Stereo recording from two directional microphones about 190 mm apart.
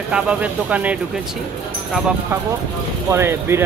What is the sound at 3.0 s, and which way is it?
Speech, 15° right (ahead or behind).